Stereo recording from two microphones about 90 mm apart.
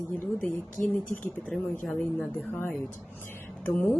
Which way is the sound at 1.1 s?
15° left (ahead or behind).